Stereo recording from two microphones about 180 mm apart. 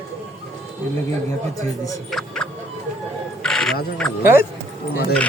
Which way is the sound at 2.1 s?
Centre (ahead or behind).